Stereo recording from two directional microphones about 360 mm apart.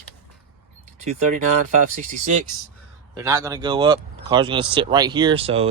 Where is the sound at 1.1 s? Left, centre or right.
Right.